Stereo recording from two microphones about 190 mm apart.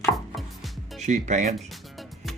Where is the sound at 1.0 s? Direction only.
40° right (ahead or behind).